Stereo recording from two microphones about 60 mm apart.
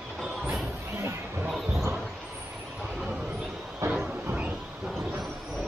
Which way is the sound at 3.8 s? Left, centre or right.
Right.